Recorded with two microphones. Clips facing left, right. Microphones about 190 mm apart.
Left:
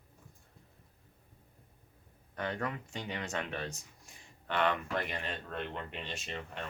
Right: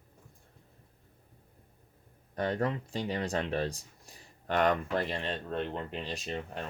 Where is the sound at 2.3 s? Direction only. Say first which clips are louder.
Right 6 dB; 35° right (ahead or behind).